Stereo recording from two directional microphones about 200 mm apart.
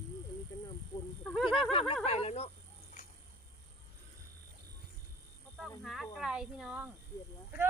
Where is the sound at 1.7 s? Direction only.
30° left (ahead or behind).